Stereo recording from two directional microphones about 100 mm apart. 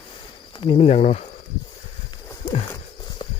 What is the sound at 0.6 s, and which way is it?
Speech, 70° left (ahead or behind).